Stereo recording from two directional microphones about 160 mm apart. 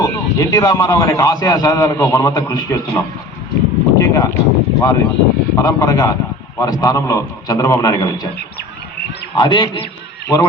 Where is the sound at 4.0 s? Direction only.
20° left (ahead or behind).